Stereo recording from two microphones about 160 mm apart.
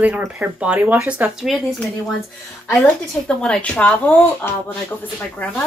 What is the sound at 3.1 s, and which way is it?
Speech, 5° left (ahead or behind).